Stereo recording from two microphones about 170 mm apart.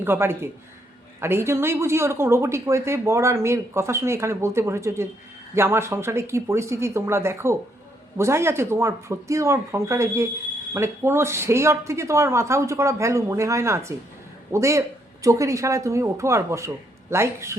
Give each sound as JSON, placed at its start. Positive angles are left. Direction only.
{"t": 0.0, "sound": "speech", "side_deg": -15}